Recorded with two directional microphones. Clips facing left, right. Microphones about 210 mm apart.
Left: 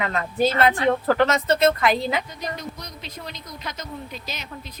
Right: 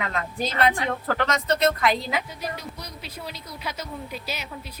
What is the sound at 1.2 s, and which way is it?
A woman's voice, 5° left (ahead or behind).